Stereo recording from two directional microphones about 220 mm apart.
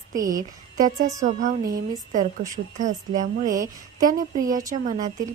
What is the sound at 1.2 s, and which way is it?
Speech, 35° right (ahead or behind).